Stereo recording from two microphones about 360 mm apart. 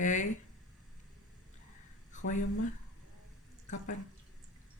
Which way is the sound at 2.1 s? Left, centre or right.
Left.